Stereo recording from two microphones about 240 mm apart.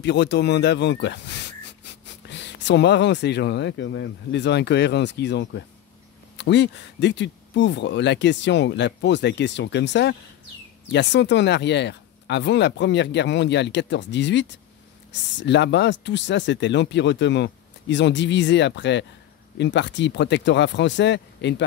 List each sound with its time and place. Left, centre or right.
0.0 s speech: left